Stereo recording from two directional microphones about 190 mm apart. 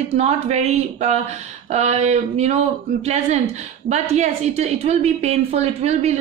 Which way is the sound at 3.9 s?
35° right (ahead or behind).